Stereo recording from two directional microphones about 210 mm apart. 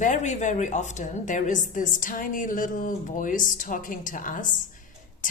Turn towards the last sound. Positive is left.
turn(degrees=40)  # may be behind; listen again after turning